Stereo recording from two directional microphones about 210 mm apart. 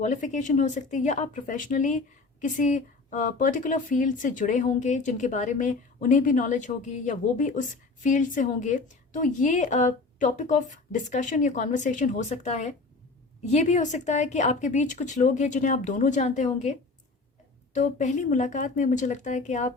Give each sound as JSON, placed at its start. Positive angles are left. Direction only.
{"t": 0.0, "sound": "speech", "side_deg": 35}
{"t": 17.7, "sound": "speech", "side_deg": 35}